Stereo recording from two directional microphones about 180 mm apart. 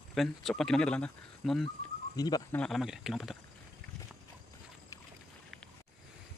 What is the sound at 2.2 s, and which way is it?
Speech, 20° left (ahead or behind).